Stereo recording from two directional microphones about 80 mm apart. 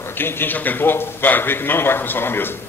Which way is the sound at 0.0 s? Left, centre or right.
Left.